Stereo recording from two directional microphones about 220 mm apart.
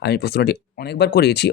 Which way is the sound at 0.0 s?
45° left (ahead or behind).